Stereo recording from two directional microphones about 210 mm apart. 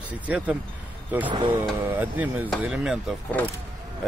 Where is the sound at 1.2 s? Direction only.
20° right (ahead or behind).